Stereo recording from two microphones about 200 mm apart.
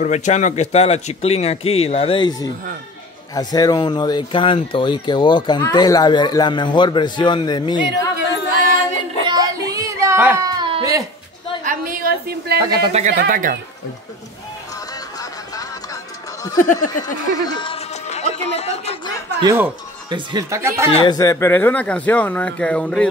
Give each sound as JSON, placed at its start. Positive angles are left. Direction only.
{"t": 0.0, "sound": "a man's voice", "side_deg": 35}
{"t": 9.2, "sound": "a sound", "side_deg": -20}
{"t": 11.6, "sound": "a sound", "side_deg": -45}
{"t": 12.5, "sound": "a man's voice", "side_deg": -20}
{"t": 13.1, "sound": "speech", "side_deg": -45}
{"t": 15.1, "sound": "music", "side_deg": 20}
{"t": 16.5, "sound": "speech", "side_deg": 40}
{"t": 16.9, "sound": "speech", "side_deg": 20}
{"t": 19.4, "sound": "speech", "side_deg": -10}
{"t": 20.1, "sound": "speech", "side_deg": -25}
{"t": 20.9, "sound": "speech", "side_deg": 25}